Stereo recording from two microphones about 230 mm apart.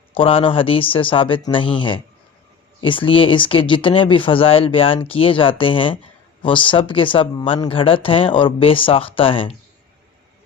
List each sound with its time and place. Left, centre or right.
0.1 s speech: left